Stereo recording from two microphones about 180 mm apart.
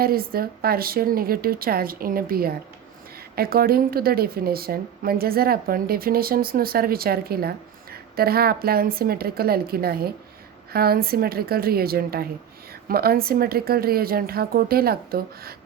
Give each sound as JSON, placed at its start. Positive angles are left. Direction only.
{"t": 0.0, "sound": "a woman's voice", "side_deg": -55}